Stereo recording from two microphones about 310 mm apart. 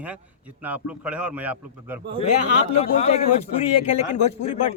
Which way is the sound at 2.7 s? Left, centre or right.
Centre.